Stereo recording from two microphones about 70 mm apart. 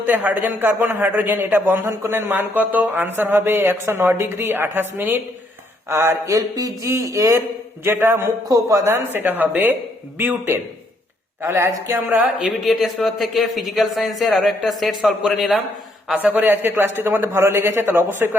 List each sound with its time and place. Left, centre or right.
0.0 s a man's voice: right
5.9 s speech: right
7.9 s speech: right
8.2 s a man's voice: right
8.9 s a man's voice: right
11.9 s a man's voice: right
12.4 s speech: centre
16.1 s speech: right